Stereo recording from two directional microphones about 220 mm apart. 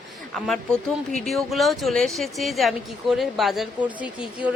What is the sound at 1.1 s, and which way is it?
A woman's voice, centre (ahead or behind).